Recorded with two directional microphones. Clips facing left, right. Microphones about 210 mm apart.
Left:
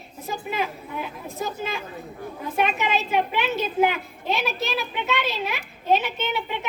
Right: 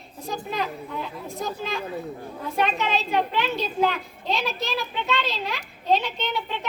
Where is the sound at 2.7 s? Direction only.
15° left (ahead or behind).